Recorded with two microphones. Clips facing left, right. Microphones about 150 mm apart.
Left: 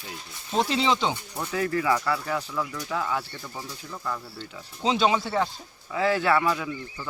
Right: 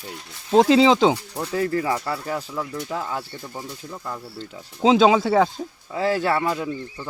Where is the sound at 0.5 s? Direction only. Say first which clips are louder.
Right 9 dB; 90° right.